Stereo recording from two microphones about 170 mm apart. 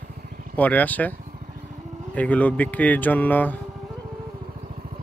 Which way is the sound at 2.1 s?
10° left (ahead or behind).